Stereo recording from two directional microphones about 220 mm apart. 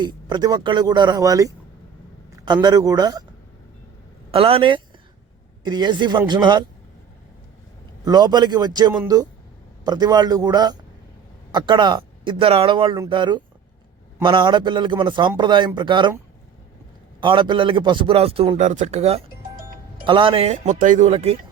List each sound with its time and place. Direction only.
0.0 s a man's voice: 20° right (ahead or behind)
4.3 s a man's voice: 25° right (ahead or behind)
8.0 s a man's voice: 20° right (ahead or behind)
17.2 s a man's voice: 20° right (ahead or behind)